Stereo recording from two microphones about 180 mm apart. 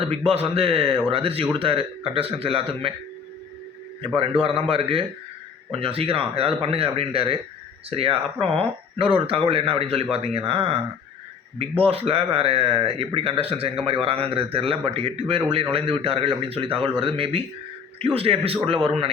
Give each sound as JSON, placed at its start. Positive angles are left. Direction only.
{"t": 0.3, "sound": "speech", "side_deg": -35}
{"t": 4.1, "sound": "speech", "side_deg": -30}
{"t": 11.8, "sound": "speech", "side_deg": -30}